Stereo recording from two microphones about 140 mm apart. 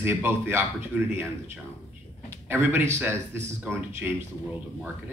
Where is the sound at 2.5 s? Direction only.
15° right (ahead or behind).